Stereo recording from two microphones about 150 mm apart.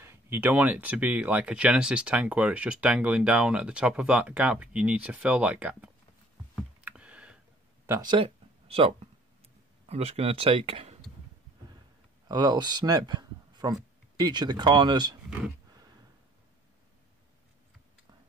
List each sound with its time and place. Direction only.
0.0 s speech: 15° right (ahead or behind)
6.8 s computer keyboard: 10° right (ahead or behind)
8.0 s speech: 35° right (ahead or behind)
12.3 s speech: 25° right (ahead or behind)